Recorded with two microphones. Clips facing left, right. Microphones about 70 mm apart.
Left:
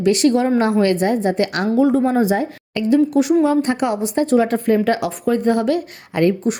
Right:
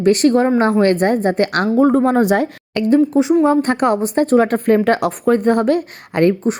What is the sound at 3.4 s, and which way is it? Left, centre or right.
A woman's voice, right.